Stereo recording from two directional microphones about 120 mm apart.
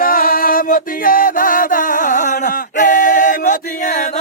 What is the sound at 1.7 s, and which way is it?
Male singing, 90° left.